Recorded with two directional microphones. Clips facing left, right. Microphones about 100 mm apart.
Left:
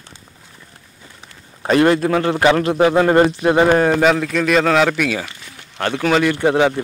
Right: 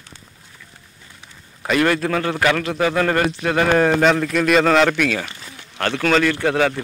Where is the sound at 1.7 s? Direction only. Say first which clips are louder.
Left 4 dB; 25° left (ahead or behind).